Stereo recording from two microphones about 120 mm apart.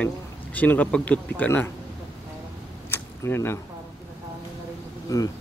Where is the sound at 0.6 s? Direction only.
15° left (ahead or behind).